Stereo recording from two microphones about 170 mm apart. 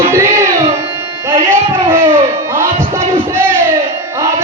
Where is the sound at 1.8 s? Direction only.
15° right (ahead or behind).